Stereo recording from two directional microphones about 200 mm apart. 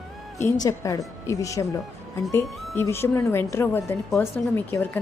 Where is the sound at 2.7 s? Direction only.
10° left (ahead or behind).